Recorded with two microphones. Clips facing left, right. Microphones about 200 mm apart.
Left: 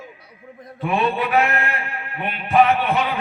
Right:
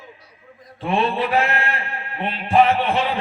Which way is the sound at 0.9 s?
30° right (ahead or behind).